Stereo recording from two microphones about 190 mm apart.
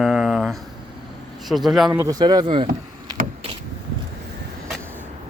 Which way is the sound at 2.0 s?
20° right (ahead or behind).